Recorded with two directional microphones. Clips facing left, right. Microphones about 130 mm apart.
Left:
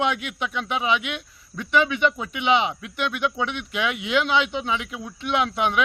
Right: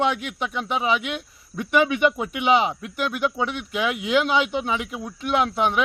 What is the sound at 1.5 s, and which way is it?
Speech, 10° right (ahead or behind).